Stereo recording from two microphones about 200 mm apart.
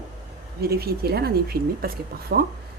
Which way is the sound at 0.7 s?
50° right (ahead or behind).